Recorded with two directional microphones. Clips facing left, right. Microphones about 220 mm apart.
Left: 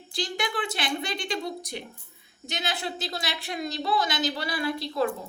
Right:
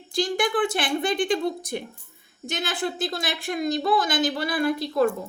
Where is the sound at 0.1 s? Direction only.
50° right (ahead or behind).